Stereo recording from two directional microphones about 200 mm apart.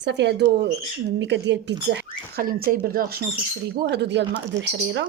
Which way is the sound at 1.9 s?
50° right (ahead or behind).